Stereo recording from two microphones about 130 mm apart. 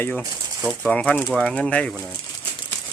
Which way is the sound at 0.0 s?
10° left (ahead or behind).